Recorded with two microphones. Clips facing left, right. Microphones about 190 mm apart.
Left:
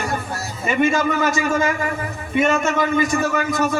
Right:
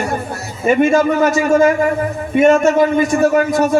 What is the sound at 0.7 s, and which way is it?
Speech, 50° right (ahead or behind).